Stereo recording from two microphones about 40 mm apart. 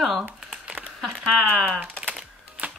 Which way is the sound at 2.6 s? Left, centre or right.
Right.